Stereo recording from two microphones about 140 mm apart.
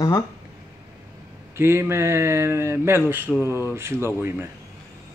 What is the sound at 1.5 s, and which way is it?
Speech, 20° right (ahead or behind).